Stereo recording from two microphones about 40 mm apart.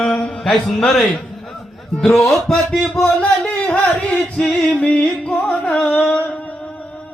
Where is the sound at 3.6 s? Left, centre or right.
Left.